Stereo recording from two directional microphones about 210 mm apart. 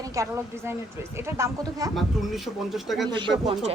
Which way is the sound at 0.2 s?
10° right (ahead or behind).